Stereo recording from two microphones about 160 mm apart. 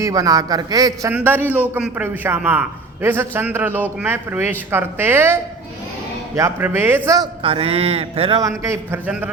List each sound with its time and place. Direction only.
0.0 s a man's voice: 20° right (ahead or behind)
1.1 s a man's voice: 10° right (ahead or behind)
7.2 s speech: 35° right (ahead or behind)
8.4 s a man's voice: 20° right (ahead or behind)